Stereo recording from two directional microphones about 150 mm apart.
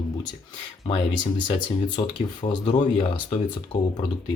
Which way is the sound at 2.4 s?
30° left (ahead or behind).